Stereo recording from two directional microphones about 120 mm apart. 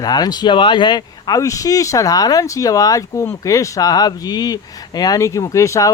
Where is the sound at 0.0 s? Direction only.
35° left (ahead or behind).